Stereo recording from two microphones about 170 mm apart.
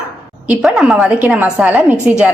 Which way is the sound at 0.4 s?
5° right (ahead or behind).